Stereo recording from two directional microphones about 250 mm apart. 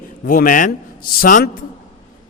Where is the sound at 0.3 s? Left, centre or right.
Left.